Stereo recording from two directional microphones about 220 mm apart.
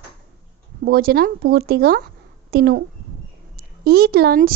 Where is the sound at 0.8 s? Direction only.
45° right (ahead or behind).